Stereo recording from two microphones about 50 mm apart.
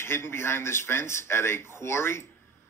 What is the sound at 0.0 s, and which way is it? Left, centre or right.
Speech, left.